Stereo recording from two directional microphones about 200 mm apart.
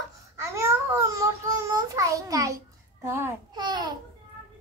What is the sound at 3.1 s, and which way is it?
Speech, 15° right (ahead or behind).